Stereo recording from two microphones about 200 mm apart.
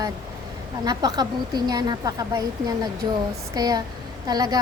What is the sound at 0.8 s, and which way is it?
Speech, 20° right (ahead or behind).